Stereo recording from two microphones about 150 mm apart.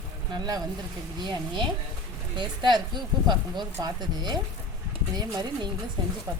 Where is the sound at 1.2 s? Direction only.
30° right (ahead or behind).